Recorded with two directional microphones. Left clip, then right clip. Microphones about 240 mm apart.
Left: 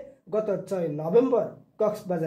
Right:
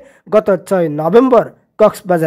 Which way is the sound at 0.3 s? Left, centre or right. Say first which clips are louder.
Right 15 dB; right.